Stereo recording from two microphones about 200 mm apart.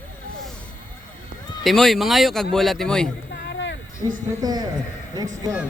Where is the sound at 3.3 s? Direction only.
60° left (ahead or behind).